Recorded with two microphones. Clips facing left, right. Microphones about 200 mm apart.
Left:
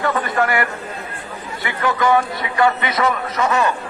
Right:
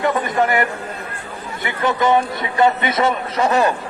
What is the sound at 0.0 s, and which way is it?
A man's voice, 20° right (ahead or behind).